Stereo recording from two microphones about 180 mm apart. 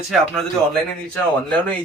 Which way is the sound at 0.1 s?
Centre (ahead or behind).